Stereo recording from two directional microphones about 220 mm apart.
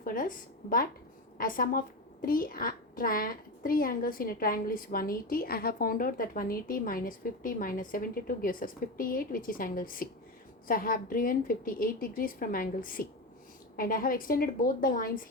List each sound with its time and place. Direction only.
0.0 s a woman's voice: 40° left (ahead or behind)